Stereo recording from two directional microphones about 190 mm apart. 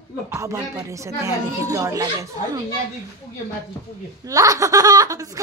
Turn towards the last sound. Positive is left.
turn(degrees=-20)  # may be behind; listen again after turning